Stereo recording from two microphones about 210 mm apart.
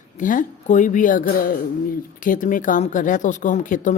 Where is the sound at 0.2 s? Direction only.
40° left (ahead or behind).